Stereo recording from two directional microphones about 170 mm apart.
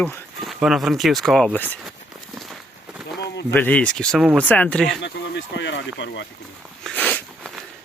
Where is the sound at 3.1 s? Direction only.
85° left.